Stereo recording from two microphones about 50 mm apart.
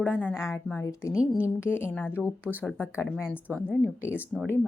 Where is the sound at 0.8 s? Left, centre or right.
Left.